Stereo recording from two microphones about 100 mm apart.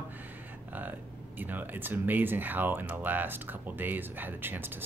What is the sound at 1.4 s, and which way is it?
Speech, 20° right (ahead or behind).